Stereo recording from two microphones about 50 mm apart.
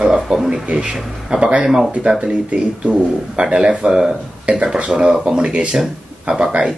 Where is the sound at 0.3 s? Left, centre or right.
Centre.